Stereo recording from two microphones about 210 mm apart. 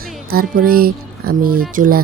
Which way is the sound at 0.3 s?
45° right (ahead or behind).